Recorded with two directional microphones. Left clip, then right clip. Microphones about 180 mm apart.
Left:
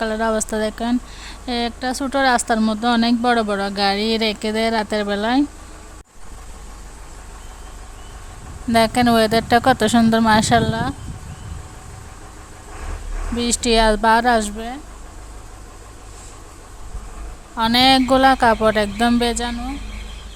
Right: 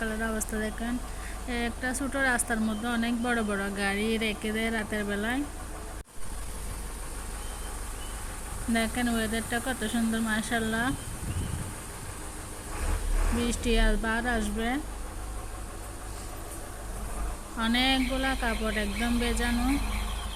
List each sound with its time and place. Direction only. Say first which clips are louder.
0.0 s speech: left 12 dB; 45° left (ahead or behind)
8.7 s speech: left 14 dB; 55° left (ahead or behind); by 10.9 s 40° left (ahead or behind)
13.4 s speech: left 13 dB; 50° left (ahead or behind)
17.6 s speech: left 12 dB; 50° left (ahead or behind)